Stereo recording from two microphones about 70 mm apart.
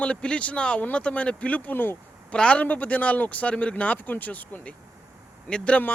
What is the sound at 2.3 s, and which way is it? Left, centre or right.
A man's voice, centre.